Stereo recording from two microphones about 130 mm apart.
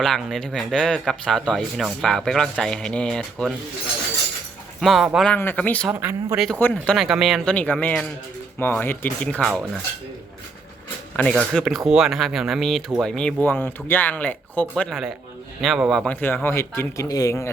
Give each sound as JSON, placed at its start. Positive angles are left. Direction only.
{"t": 0.0, "sound": "speech", "side_deg": 5}
{"t": 4.8, "sound": "speech", "side_deg": 0}
{"t": 5.3, "sound": "speech", "side_deg": 10}
{"t": 5.9, "sound": "speech", "side_deg": -15}
{"t": 6.6, "sound": "speech", "side_deg": 10}
{"t": 7.5, "sound": "speech", "side_deg": 10}
{"t": 9.4, "sound": "speech", "side_deg": 0}
{"t": 11.2, "sound": "speech", "side_deg": 5}
{"t": 16.2, "sound": "speech", "side_deg": 15}